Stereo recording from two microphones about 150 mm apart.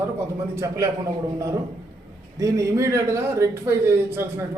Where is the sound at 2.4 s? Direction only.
20° right (ahead or behind).